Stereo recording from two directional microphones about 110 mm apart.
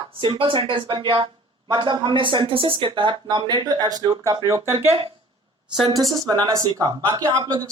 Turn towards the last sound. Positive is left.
turn(degrees=-40)  # may be behind; listen again after turning